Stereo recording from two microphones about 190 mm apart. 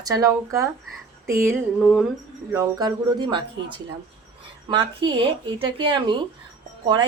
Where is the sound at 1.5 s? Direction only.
Centre (ahead or behind).